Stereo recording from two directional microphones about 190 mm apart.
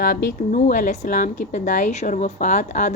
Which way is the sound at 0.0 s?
50° left (ahead or behind).